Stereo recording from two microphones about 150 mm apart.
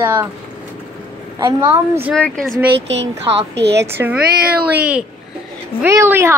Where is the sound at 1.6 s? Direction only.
15° right (ahead or behind).